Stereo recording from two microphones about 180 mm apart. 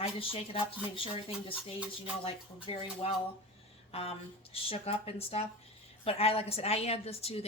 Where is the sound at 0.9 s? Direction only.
30° left (ahead or behind).